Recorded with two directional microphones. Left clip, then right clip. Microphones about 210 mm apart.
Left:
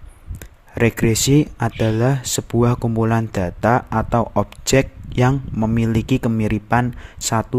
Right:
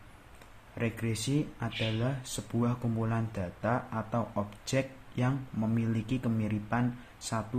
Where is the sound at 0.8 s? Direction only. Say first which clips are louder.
Left 17 dB; 55° left (ahead or behind).